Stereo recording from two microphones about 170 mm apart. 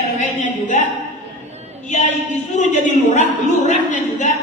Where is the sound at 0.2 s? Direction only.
45° left (ahead or behind).